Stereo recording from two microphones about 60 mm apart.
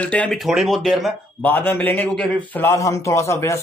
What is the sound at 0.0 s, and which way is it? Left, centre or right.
Speech, left.